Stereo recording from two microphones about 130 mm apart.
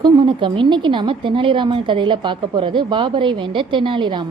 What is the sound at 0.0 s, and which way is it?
Speech, 40° right (ahead or behind).